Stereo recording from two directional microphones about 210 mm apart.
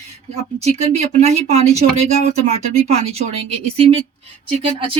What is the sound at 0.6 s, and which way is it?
Speech, 30° right (ahead or behind).